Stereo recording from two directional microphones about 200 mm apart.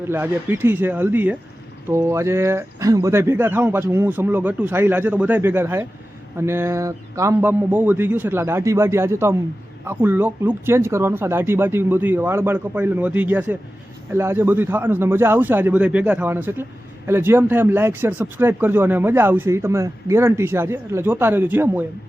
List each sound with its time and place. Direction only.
0.1 s speech: 10° right (ahead or behind)